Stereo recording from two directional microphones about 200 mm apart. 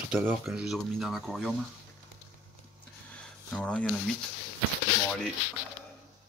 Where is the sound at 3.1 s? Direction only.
5° left (ahead or behind).